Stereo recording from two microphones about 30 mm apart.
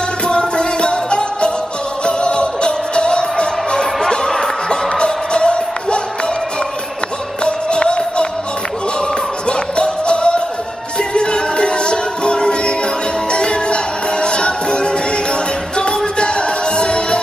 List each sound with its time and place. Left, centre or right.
0.3 s music: left
4.9 s music: left
7.4 s music: left
9.5 s music: left
16.2 s music: left